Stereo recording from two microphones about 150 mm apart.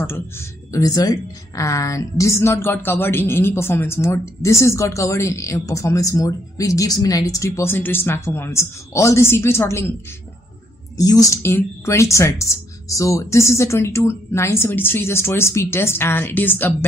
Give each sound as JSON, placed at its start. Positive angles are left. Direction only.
{"t": 0.7, "sound": "a woman's voice", "side_deg": 25}
{"t": 11.0, "sound": "speech", "side_deg": 25}